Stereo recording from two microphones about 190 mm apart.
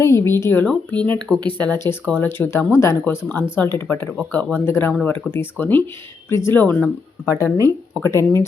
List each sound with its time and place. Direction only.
0.0 s speech: 15° left (ahead or behind)
1.4 s speech: 20° right (ahead or behind)
1.7 s speech: 10° left (ahead or behind)